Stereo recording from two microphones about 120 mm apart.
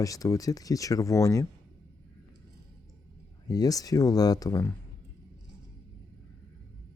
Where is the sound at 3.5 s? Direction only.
30° left (ahead or behind).